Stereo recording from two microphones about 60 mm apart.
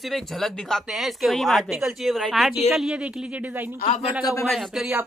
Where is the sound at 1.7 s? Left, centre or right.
Centre.